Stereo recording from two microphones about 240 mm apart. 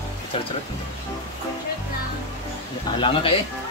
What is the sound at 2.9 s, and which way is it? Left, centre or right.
Speech, left.